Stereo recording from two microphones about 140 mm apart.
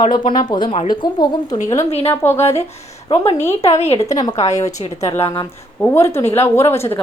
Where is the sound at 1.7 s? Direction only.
45° left (ahead or behind).